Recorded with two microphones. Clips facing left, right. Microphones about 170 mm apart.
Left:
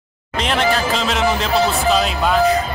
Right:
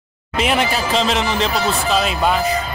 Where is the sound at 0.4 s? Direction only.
5° right (ahead or behind).